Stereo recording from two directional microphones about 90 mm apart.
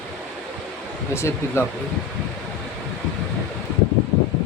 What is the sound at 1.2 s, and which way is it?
Speech, 30° left (ahead or behind).